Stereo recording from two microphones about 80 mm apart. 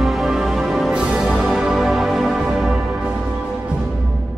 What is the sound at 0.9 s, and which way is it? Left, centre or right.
Music, centre.